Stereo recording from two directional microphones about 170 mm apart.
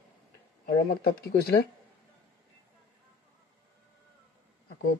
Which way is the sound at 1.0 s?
70° left (ahead or behind).